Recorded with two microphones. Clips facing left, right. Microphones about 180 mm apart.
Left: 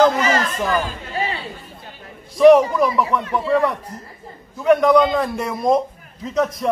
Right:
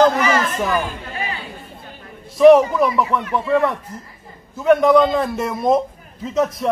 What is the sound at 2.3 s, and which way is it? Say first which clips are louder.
Speech: right 1 dB; centre (ahead or behind).